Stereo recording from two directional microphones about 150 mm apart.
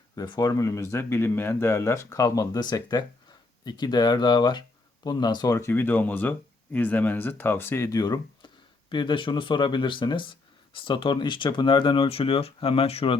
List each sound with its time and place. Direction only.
0.2 s speech: 25° left (ahead or behind)